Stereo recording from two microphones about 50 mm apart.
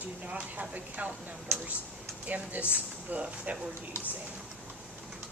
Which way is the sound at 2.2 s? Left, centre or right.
Right.